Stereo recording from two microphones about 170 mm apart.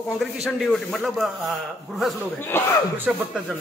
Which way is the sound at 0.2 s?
Centre (ahead or behind).